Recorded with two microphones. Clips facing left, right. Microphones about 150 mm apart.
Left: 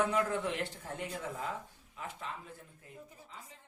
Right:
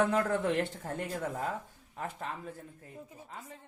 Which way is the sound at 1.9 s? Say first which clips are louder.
Right 5 dB; 50° right (ahead or behind).